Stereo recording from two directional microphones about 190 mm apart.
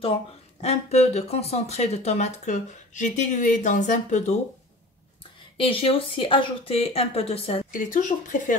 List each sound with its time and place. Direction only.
0.0 s speech: 30° left (ahead or behind)
5.6 s speech: 30° left (ahead or behind)
7.7 s speech: 45° left (ahead or behind)